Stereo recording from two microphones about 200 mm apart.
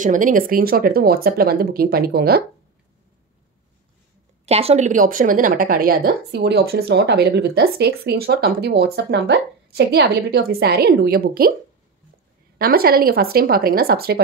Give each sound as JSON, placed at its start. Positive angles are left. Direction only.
{"t": 0.0, "sound": "a woman's voice", "side_deg": -40}
{"t": 4.5, "sound": "a woman's voice", "side_deg": -30}
{"t": 12.5, "sound": "a woman's voice", "side_deg": -50}